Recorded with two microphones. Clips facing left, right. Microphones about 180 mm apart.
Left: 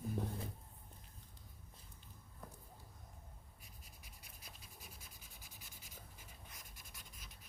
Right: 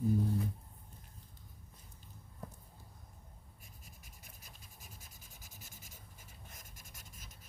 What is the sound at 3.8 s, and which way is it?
Writing, 45° right (ahead or behind).